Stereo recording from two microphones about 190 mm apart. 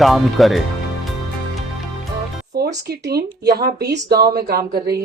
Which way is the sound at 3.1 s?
55° right (ahead or behind).